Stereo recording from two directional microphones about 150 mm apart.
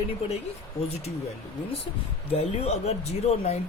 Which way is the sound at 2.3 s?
45° left (ahead or behind).